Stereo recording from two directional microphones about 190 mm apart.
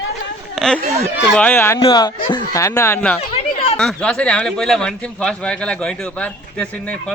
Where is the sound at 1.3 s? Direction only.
10° left (ahead or behind).